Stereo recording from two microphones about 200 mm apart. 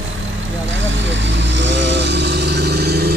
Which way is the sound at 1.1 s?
65° right (ahead or behind).